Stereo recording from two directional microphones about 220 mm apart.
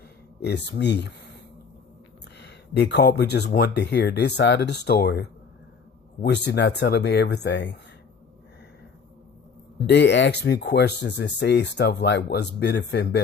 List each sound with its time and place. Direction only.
0.4 s speech: 50° left (ahead or behind)
2.4 s speech: 50° left (ahead or behind)
6.2 s speech: 50° left (ahead or behind)
9.8 s speech: 50° left (ahead or behind)